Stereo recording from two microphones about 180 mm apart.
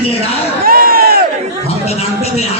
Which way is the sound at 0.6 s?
55° right (ahead or behind).